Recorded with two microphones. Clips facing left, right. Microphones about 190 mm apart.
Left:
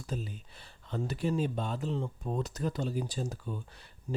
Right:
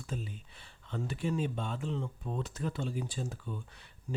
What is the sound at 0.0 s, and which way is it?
Speech, 40° left (ahead or behind).